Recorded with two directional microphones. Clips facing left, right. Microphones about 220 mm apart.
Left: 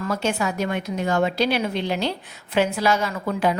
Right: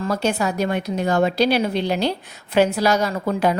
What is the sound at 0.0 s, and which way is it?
A woman's voice, 35° right (ahead or behind).